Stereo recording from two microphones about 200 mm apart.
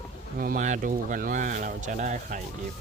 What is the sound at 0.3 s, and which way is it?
Speech, 45° right (ahead or behind).